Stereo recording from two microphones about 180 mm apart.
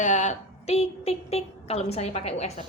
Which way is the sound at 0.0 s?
40° left (ahead or behind).